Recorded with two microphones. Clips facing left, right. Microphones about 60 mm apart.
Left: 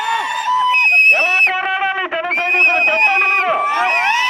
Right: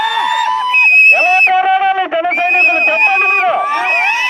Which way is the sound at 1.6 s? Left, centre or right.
Centre.